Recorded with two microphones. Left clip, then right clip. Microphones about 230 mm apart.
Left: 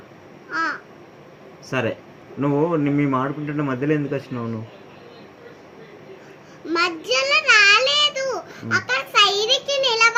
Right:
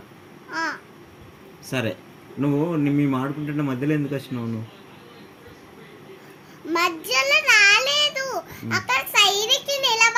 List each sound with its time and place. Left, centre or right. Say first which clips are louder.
0.5 s babbling: left 3 dB; right
1.7 s a man's voice: left 3 dB; right
6.7 s child singing: left 2 dB; right